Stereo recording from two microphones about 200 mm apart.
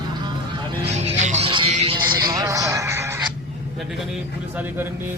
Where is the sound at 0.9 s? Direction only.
35° right (ahead or behind); by 3.2 s 15° right (ahead or behind).